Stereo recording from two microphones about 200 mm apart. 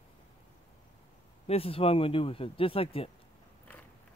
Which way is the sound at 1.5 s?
30° left (ahead or behind).